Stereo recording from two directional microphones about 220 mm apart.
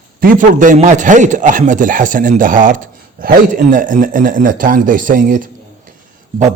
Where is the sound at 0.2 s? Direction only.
40° right (ahead or behind).